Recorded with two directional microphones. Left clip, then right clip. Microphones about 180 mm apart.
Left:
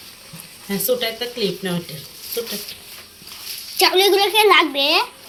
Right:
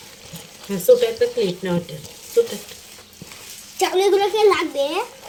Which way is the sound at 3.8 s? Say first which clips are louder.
Left 3 dB; 10° left (ahead or behind).